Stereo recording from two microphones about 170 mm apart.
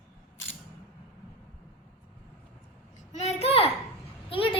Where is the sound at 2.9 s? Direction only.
40° left (ahead or behind).